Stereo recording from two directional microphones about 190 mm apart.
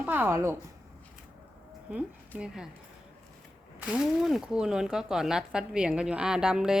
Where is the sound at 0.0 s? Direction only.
10° right (ahead or behind).